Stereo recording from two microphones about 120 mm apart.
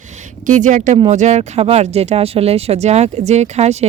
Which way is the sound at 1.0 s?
75° right (ahead or behind).